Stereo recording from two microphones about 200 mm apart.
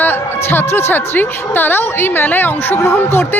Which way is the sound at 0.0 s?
10° left (ahead or behind).